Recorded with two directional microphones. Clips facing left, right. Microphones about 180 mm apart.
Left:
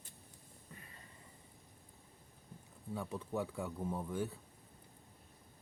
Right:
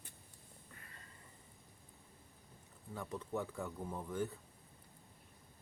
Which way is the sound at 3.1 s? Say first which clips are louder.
Even; 10° left (ahead or behind).